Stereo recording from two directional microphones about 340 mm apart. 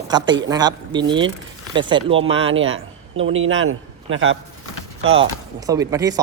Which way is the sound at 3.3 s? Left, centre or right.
Right.